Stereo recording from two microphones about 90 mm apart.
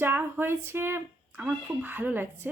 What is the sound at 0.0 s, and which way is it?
Speech, 25° right (ahead or behind).